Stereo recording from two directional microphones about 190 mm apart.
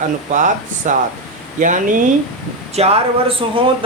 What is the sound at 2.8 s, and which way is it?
Speech, 30° right (ahead or behind).